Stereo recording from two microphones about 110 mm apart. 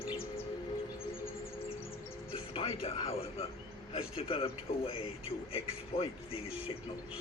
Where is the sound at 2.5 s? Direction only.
55° left (ahead or behind).